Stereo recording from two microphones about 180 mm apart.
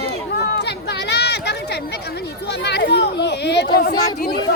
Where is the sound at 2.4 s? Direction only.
70° left (ahead or behind).